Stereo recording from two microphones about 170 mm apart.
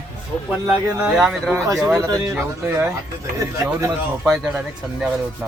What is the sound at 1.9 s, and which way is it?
Speech, 20° right (ahead or behind).